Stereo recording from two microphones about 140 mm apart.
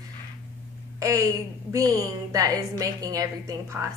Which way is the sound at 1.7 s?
25° right (ahead or behind).